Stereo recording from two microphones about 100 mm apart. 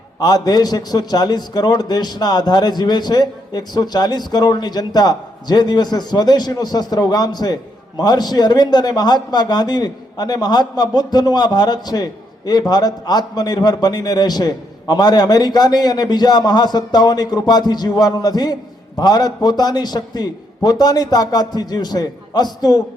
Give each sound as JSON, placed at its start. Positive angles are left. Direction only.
{"t": 0.2, "sound": "a man's voice", "side_deg": 40}